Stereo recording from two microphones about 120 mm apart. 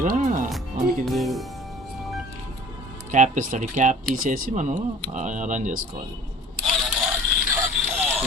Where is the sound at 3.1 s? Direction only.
90° right.